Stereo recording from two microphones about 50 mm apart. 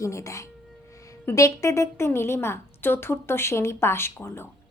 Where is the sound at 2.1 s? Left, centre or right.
Left.